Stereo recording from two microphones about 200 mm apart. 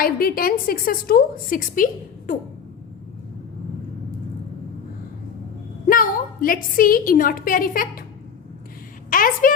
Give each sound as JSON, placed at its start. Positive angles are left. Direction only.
{"t": 0.0, "sound": "a woman's voice", "side_deg": 45}
{"t": 5.9, "sound": "a woman's voice", "side_deg": 45}
{"t": 9.0, "sound": "a woman's voice", "side_deg": 45}